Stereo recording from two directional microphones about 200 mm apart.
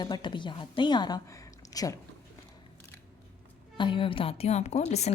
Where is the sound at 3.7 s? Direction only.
25° left (ahead or behind).